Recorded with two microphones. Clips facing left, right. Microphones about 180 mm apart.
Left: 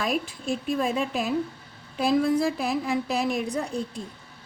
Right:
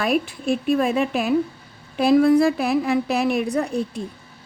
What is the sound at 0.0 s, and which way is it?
A woman's voice, 65° right (ahead or behind).